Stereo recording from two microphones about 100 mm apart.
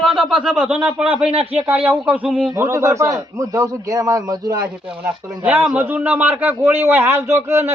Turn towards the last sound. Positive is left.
turn(degrees=-25)  # may be behind; listen again after turning